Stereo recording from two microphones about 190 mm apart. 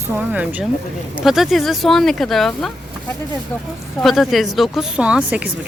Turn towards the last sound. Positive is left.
turn(degrees=-5)  # may be behind; listen again after turning